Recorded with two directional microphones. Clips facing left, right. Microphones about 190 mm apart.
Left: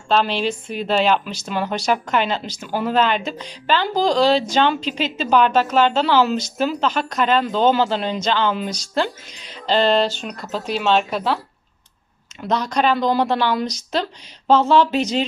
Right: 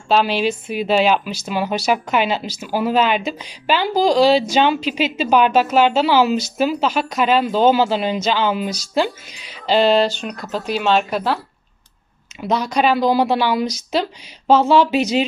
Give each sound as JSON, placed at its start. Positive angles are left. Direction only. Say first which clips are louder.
{"t": 0.1, "sound": "a woman's voice", "louder": "right 2 dB", "side_deg": -10}
{"t": 12.4, "sound": "a woman's voice", "louder": "right 2 dB", "side_deg": -10}